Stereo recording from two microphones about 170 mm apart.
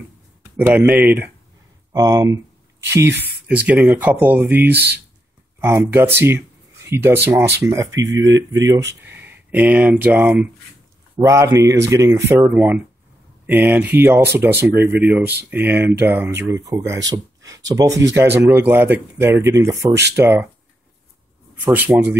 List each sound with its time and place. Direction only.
0.6 s speech: 10° right (ahead or behind)
1.9 s speech: 20° right (ahead or behind)
4.7 s speech: 75° right (ahead or behind)
5.6 s speech: 15° right (ahead or behind)
8.0 s speech: 90° right
9.1 s speech: 10° right (ahead or behind)
21.7 s speech: 10° right (ahead or behind)